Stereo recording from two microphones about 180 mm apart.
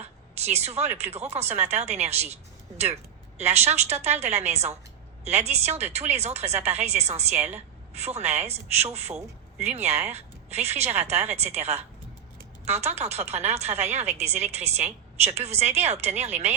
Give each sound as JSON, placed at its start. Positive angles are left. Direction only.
{"t": 0.0, "sound": "speech", "side_deg": -35}
{"t": 3.3, "sound": "speech", "side_deg": -35}